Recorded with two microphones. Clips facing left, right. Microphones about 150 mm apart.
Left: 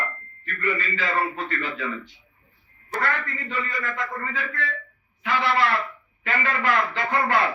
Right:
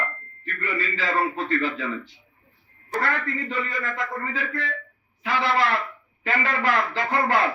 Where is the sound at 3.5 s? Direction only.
30° right (ahead or behind).